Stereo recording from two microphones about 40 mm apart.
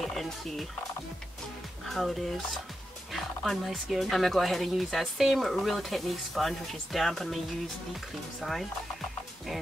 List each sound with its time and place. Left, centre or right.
0.0 s speech: centre
1.9 s speech: centre
3.1 s music: centre
4.0 s speech: centre